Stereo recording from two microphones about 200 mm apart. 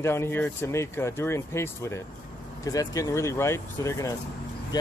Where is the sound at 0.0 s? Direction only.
10° left (ahead or behind).